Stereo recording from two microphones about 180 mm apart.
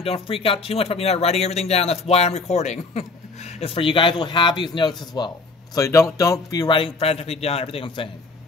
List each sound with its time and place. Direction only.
0.0 s a man's voice: 30° left (ahead or behind)